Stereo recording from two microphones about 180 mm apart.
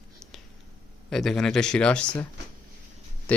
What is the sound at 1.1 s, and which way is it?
Speech, centre (ahead or behind).